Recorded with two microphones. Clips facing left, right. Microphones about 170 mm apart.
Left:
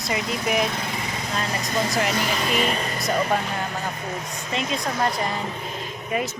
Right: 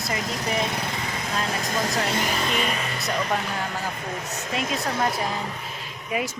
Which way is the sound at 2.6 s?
35° left (ahead or behind).